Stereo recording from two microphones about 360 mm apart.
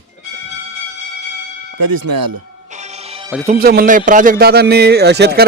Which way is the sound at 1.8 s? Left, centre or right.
Right.